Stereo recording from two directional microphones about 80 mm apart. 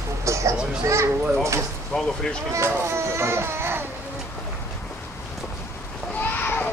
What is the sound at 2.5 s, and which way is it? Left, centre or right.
A child's voice, right.